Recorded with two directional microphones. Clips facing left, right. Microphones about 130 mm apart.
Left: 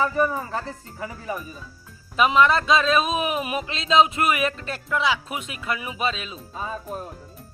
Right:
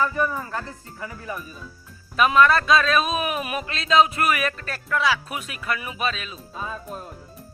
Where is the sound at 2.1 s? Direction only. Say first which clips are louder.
Right 1 dB; 20° left (ahead or behind).